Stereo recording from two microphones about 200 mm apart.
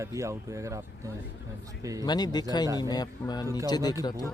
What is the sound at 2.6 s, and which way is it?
Speech, 15° right (ahead or behind).